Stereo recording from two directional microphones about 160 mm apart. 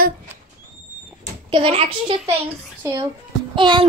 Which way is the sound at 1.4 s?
35° right (ahead or behind).